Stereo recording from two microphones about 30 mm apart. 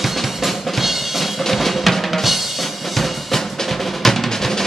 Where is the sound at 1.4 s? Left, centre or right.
Centre.